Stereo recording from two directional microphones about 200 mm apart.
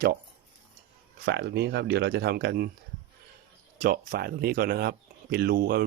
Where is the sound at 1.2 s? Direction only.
55° right (ahead or behind).